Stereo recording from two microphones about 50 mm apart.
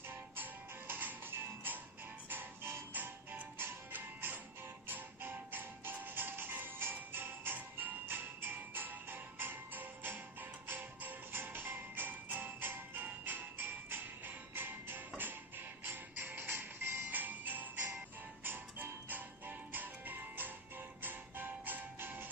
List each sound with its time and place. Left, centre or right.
0.1 s music: right
17.1 s music: right